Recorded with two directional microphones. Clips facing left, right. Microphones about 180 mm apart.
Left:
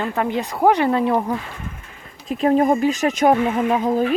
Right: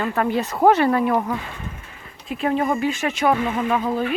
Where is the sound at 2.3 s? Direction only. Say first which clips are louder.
Left 5 dB; 40° left (ahead or behind).